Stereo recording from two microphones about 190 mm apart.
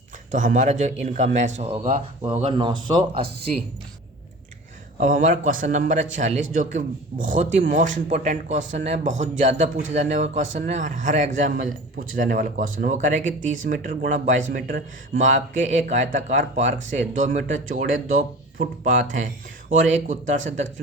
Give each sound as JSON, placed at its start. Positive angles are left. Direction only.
{"t": 0.3, "sound": "a man's voice", "side_deg": -40}
{"t": 4.9, "sound": "a man's voice", "side_deg": -45}